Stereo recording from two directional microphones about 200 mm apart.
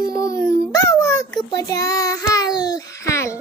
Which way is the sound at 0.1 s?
15° left (ahead or behind).